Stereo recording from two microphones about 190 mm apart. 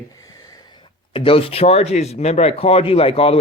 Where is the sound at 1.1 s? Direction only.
30° left (ahead or behind).